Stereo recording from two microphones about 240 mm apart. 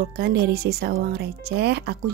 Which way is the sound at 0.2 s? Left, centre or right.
Right.